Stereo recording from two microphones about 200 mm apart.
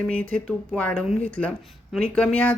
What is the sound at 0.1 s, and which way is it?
A woman's voice, 5° left (ahead or behind).